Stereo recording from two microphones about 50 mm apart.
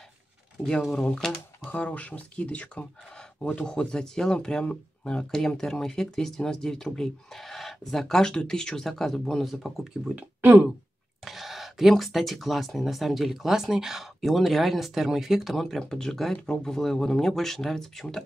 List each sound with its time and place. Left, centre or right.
0.9 s speech: centre
1.7 s speech: left
3.6 s speech: centre
11.2 s speech: centre
15.5 s speech: centre